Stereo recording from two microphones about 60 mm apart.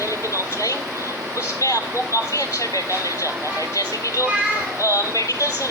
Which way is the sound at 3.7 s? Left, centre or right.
Left.